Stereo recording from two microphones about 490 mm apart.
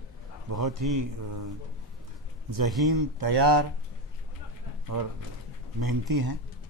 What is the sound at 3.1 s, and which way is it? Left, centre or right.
Speech, right.